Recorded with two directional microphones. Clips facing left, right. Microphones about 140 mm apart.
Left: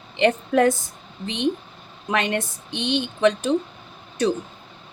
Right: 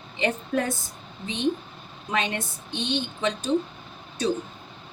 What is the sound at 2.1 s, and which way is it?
A woman's voice, 70° left (ahead or behind).